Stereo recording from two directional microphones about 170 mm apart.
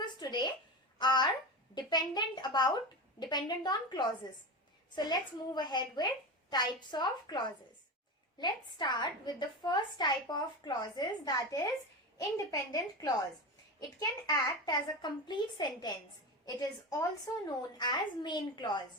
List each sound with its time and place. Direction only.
0.0 s a sound: 25° left (ahead or behind)
0.9 s a child's voice: 25° left (ahead or behind)
14.4 s a woman's voice: 25° left (ahead or behind)